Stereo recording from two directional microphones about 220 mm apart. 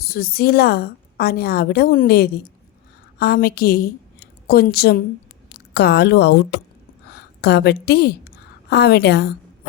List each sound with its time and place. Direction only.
0.0 s a woman's voice: 45° left (ahead or behind)